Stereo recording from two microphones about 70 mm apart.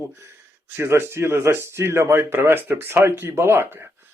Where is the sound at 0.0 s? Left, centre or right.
Right.